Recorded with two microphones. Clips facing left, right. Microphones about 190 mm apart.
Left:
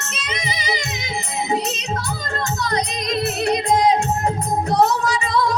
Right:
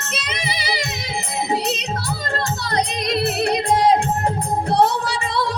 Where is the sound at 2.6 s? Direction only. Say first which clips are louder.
Right 1 dB; 30° right (ahead or behind).